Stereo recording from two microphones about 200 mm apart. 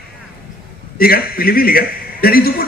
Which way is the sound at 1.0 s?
50° left (ahead or behind).